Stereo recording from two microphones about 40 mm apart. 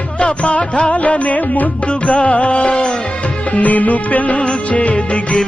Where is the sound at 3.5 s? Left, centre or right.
Left.